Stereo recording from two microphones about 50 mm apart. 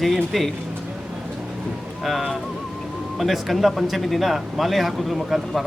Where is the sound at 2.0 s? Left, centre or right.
Centre.